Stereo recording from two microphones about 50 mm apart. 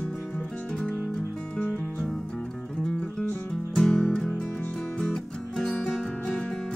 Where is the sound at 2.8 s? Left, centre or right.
Centre.